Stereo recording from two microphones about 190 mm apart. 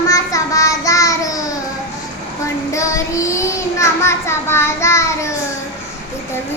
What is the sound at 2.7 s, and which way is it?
Child singing, 15° left (ahead or behind).